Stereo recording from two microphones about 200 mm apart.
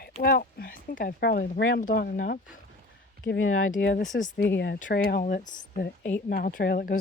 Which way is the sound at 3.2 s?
60° left (ahead or behind).